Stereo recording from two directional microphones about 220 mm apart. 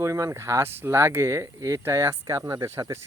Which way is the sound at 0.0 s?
15° right (ahead or behind).